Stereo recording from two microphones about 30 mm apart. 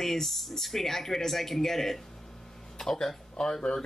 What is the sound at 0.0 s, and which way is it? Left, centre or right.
A man's voice, centre.